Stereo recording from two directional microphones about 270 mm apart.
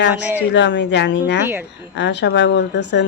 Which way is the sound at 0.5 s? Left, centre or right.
Left.